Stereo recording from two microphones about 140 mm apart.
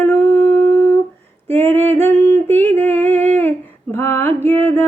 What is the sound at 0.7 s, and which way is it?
Humming, 15° left (ahead or behind).